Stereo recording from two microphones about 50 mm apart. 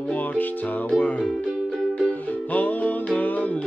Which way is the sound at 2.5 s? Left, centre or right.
Left.